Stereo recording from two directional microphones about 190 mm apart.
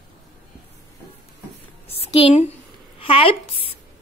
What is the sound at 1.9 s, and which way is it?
A woman's voice, 30° left (ahead or behind).